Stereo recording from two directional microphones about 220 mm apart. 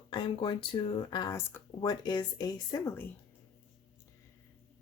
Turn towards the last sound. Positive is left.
turn(degrees=15)  # may be behind; listen again after turning